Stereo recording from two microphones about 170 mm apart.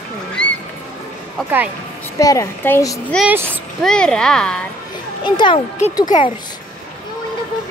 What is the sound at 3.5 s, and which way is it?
A child's voice, 5° left (ahead or behind).